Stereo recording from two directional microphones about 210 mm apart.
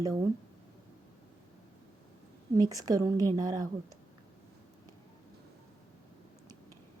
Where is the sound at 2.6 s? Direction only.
15° right (ahead or behind).